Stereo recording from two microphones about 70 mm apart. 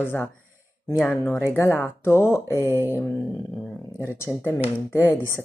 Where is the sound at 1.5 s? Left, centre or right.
Left.